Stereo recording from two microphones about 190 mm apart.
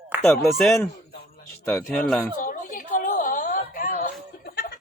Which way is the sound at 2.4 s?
45° left (ahead or behind).